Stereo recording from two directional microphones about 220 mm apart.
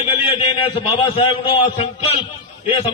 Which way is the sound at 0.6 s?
25° left (ahead or behind).